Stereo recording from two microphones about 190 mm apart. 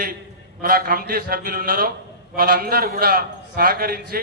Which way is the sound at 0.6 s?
50° right (ahead or behind).